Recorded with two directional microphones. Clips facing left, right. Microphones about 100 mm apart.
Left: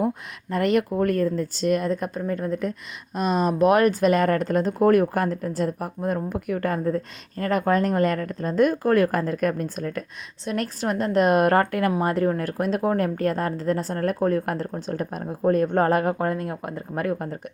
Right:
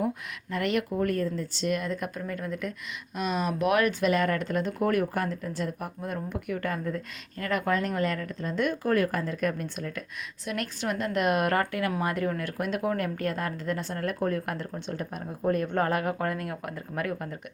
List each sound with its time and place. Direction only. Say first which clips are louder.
0.5 s speech: left 6 dB; 40° left (ahead or behind)
11.9 s speech: left 6 dB; 30° left (ahead or behind)